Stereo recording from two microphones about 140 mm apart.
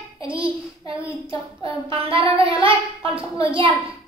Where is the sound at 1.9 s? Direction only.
40° right (ahead or behind).